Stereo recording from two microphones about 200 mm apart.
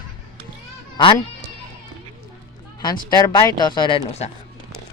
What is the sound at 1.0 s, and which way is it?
Speech, 25° left (ahead or behind).